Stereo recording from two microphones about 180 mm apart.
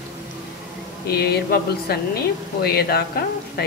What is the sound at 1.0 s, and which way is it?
Speech, 60° left (ahead or behind).